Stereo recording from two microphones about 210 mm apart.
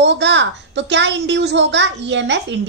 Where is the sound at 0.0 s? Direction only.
55° right (ahead or behind).